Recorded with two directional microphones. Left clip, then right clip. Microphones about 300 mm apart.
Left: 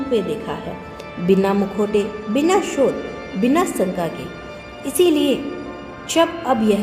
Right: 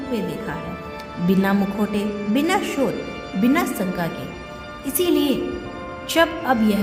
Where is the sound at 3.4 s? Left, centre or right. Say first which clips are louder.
Left 3 dB; right.